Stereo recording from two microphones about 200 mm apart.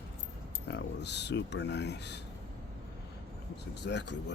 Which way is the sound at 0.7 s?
60° left (ahead or behind).